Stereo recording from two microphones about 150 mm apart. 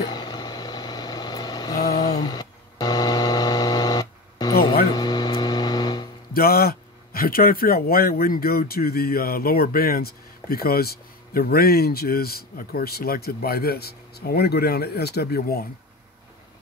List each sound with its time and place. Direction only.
0.0 s vehicle: 30° left (ahead or behind)
2.1 s a sound: 25° left (ahead or behind)
4.9 s music: 25° left (ahead or behind)
6.3 s speech: 85° left